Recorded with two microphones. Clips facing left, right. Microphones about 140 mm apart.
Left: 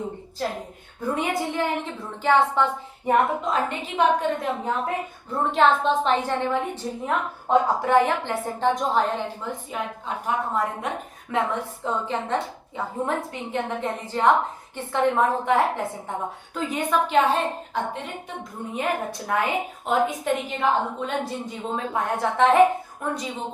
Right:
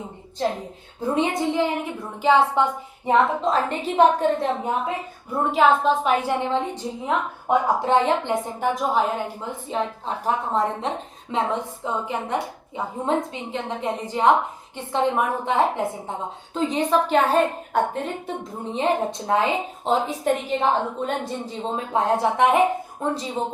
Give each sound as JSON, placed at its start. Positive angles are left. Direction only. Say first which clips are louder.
{"t": 0.3, "sound": "a woman's voice", "louder": "right 6 dB", "side_deg": -30}
{"t": 3.5, "sound": "a woman's voice", "louder": "right 3 dB", "side_deg": -35}
{"t": 4.6, "sound": "a woman's voice", "louder": "right 1 dB", "side_deg": -20}
{"t": 5.3, "sound": "a woman's voice", "louder": "right 2 dB", "side_deg": -5}
{"t": 8.7, "sound": "a woman's voice", "louder": "right 1 dB", "side_deg": -5}
{"t": 9.7, "sound": "a woman's voice", "louder": "right 7 dB", "side_deg": -35}
{"t": 16.9, "sound": "a woman's voice", "louder": "even", "side_deg": -40}
{"t": 18.7, "sound": "a woman's voice", "louder": "right 5 dB", "side_deg": -25}